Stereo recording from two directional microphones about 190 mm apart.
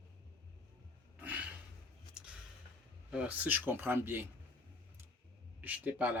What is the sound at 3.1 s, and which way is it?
Speech, 5° right (ahead or behind).